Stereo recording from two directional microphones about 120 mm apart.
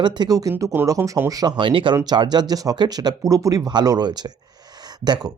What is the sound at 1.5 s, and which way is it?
Speech, 45° right (ahead or behind).